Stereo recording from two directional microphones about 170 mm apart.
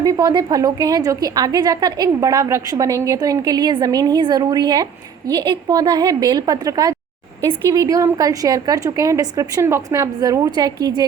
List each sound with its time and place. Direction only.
0.0 s a woman's voice: 20° right (ahead or behind)